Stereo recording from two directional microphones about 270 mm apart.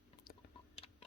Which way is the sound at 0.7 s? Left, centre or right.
Left.